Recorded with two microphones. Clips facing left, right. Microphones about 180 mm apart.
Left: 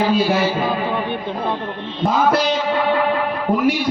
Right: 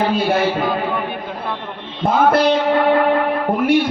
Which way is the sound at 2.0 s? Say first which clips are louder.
Right 3 dB; 55° right (ahead or behind).